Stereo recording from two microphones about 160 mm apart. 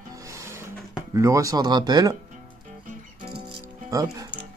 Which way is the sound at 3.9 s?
25° right (ahead or behind).